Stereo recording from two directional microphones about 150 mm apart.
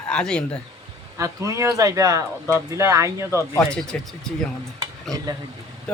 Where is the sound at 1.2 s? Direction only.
20° right (ahead or behind).